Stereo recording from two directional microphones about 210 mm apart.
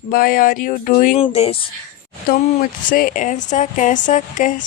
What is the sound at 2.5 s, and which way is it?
Speech, 40° left (ahead or behind).